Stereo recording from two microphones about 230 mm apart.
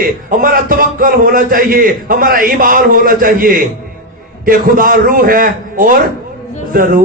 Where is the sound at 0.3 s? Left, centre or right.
Right.